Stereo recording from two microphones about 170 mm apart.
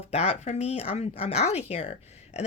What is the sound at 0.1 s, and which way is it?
Speech, 40° left (ahead or behind).